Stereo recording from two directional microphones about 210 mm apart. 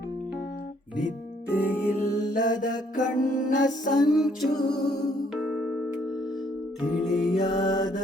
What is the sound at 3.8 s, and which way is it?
Music, 20° left (ahead or behind).